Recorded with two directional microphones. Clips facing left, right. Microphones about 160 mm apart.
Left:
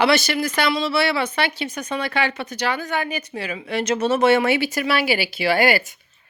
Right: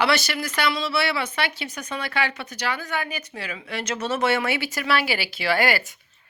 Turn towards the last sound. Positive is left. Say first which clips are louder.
# left 4 dB
turn(degrees=15)  # may be behind; listen again after turning